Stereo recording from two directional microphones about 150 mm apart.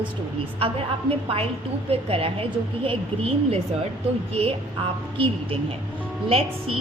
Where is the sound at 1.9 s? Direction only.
40° right (ahead or behind).